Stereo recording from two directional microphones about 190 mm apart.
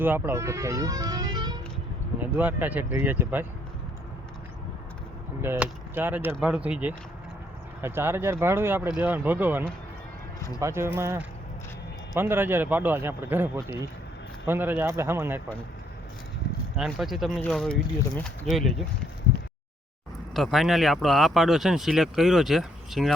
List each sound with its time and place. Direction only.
0.0 s speech: 10° right (ahead or behind)
2.4 s speech: 10° right (ahead or behind)
5.4 s speech: 10° right (ahead or behind)
16.7 s speech: 5° right (ahead or behind)
20.3 s speech: centre (ahead or behind)